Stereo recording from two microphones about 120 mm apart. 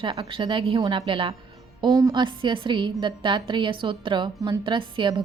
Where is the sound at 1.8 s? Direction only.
35° right (ahead or behind).